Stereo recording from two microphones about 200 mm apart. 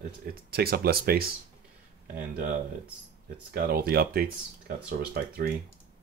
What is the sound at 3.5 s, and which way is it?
Speech, 50° right (ahead or behind).